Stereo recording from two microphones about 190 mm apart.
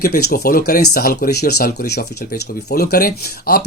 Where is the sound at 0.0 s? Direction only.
55° left (ahead or behind).